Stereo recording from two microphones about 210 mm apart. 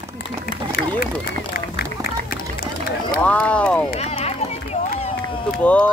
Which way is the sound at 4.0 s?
30° left (ahead or behind).